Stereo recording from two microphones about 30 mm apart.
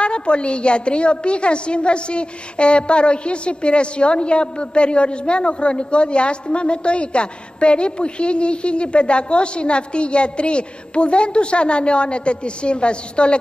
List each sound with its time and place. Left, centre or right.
0.0 s a woman's voice: left